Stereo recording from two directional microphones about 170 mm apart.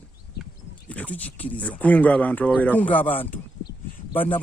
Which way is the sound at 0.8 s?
10° left (ahead or behind).